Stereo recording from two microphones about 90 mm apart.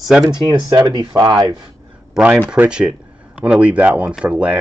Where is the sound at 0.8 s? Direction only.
50° right (ahead or behind).